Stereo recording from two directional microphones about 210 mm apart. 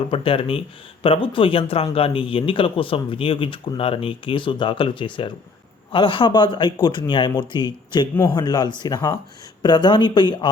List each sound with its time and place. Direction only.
0.1 s a man's voice: 25° left (ahead or behind)